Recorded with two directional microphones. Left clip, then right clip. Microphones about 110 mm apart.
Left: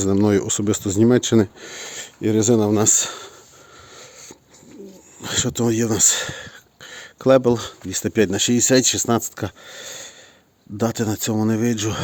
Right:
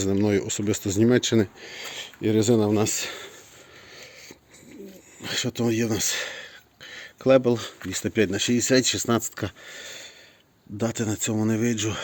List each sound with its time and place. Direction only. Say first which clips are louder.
0.0 s speech: left 5 dB; 45° left (ahead or behind)
0.6 s speech: left 4 dB; 40° left (ahead or behind)
1.7 s a sound: left 2 dB; 55° left (ahead or behind)
2.2 s speech: left 4 dB; 30° left (ahead or behind)
3.1 s a sound: left 3 dB; 25° left (ahead or behind)
3.9 s wheeze: left 2 dB; 30° left (ahead or behind)
5.2 s speech: left 5 dB; 40° left (ahead or behind)